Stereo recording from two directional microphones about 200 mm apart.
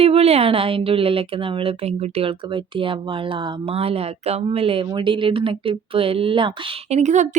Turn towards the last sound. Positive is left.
turn(degrees=-35)  # may be behind; listen again after turning